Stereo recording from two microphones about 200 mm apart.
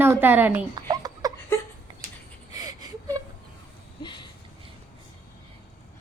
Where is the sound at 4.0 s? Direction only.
25° left (ahead or behind).